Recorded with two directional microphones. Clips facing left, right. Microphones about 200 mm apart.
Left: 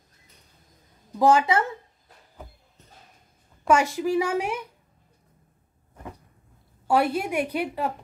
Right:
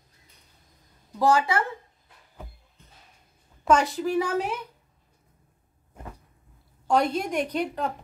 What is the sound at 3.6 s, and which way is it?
A woman's voice, 10° left (ahead or behind).